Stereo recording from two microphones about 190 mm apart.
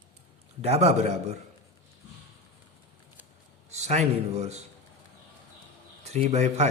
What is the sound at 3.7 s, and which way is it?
Speech, 35° right (ahead or behind).